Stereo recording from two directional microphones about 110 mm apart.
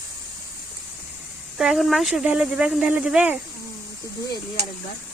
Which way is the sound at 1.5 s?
5° right (ahead or behind).